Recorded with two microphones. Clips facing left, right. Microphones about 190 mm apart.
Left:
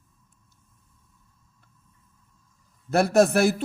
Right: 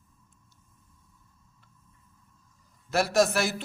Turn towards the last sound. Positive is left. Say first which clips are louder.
# left 6 dB
turn(degrees=55)  # may be behind; listen again after turning